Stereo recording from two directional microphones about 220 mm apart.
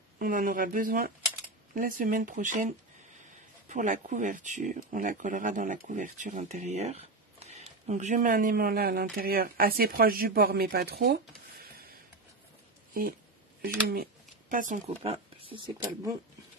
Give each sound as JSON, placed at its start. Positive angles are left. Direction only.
{"t": 0.2, "sound": "speech", "side_deg": -40}
{"t": 14.5, "sound": "speech", "side_deg": -35}
{"t": 15.4, "sound": "speech", "side_deg": -20}